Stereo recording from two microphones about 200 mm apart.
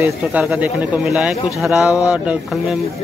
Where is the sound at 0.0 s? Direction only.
5° right (ahead or behind).